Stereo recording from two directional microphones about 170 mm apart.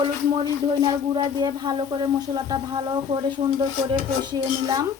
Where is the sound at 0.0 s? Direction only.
30° right (ahead or behind).